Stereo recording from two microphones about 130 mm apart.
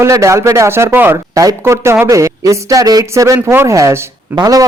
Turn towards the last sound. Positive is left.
turn(degrees=-30)  # may be behind; listen again after turning